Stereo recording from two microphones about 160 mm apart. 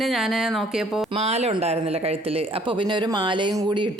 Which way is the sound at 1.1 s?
40° right (ahead or behind).